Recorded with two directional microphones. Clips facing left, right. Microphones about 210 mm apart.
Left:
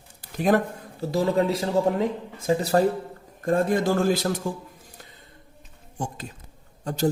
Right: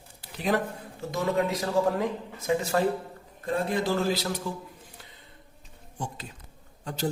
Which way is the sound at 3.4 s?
45° left (ahead or behind).